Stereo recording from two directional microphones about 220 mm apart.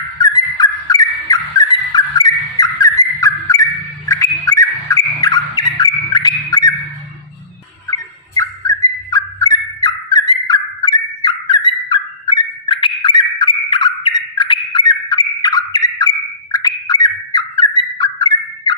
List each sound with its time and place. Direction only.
0.2 s bird: 15° left (ahead or behind)
8.4 s turkey: 15° left (ahead or behind)